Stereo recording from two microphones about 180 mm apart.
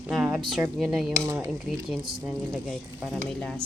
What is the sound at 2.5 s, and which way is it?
Speech, centre (ahead or behind).